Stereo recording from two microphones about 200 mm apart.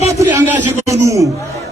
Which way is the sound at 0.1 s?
15° right (ahead or behind).